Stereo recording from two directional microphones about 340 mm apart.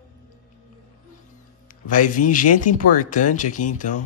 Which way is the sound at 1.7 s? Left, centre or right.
Left.